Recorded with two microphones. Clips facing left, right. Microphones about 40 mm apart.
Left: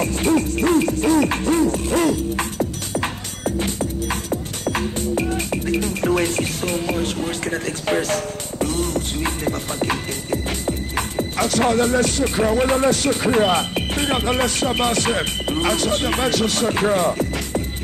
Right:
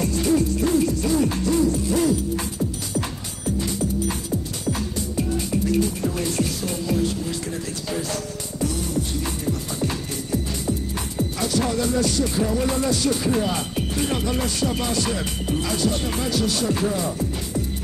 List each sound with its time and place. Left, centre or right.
0.0 s music: left